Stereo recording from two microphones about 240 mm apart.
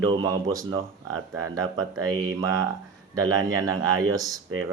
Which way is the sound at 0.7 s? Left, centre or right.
Right.